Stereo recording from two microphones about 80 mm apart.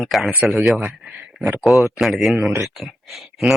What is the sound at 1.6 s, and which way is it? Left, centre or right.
A man's voice, centre.